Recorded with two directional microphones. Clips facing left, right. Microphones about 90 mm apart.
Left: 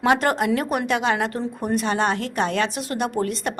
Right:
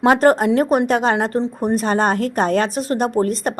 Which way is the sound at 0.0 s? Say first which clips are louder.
Right 6 dB; 40° right (ahead or behind).